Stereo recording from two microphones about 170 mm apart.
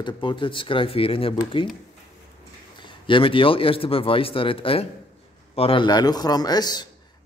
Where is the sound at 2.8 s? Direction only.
30° left (ahead or behind).